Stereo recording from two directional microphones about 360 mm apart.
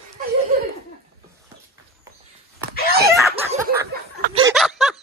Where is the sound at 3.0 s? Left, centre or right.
Centre.